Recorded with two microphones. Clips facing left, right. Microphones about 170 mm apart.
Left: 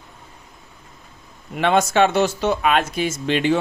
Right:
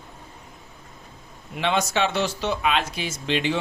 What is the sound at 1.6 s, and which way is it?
Speech, 50° left (ahead or behind).